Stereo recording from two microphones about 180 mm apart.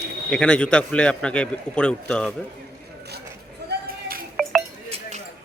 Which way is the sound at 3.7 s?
55° right (ahead or behind).